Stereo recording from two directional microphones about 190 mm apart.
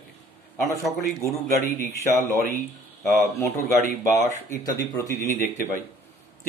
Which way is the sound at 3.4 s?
10° left (ahead or behind).